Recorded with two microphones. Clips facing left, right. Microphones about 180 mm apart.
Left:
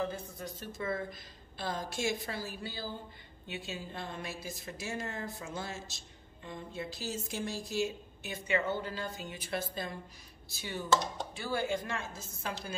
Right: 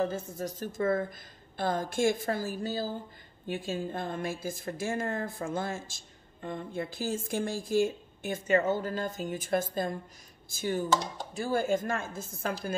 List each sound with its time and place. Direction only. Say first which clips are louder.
0.0 s a woman's voice: right 6 dB; 45° right (ahead or behind)